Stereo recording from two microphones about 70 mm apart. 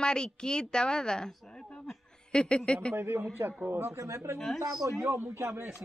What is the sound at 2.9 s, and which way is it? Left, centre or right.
Speech, right.